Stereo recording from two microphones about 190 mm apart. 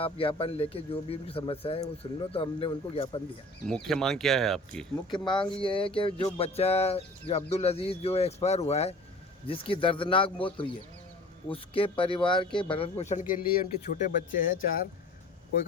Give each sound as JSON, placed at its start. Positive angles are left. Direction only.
{"t": 0.0, "sound": "speech", "side_deg": 30}
{"t": 3.7, "sound": "speech", "side_deg": 0}
{"t": 5.1, "sound": "speech", "side_deg": 25}
{"t": 11.4, "sound": "speech", "side_deg": 30}